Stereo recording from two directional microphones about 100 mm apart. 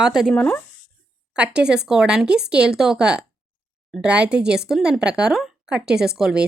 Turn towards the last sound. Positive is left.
turn(degrees=-5)  # may be behind; listen again after turning